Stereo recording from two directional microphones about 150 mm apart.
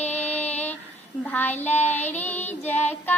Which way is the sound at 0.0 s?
45° left (ahead or behind).